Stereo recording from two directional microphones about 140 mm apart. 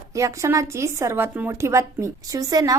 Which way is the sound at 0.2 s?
20° right (ahead or behind).